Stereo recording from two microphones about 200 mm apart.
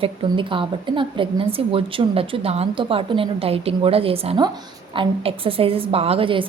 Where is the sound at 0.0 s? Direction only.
25° right (ahead or behind).